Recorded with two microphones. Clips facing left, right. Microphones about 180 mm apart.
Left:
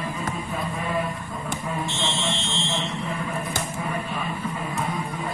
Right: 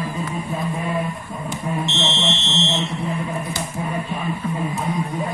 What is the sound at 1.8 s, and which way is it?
Fire alarm, 20° right (ahead or behind).